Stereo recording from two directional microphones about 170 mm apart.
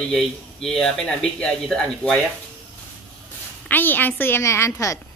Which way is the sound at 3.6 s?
10° left (ahead or behind).